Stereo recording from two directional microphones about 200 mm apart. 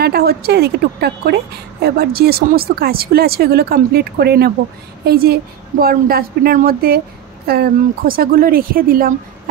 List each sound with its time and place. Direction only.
0.0 s a woman's voice: 50° right (ahead or behind)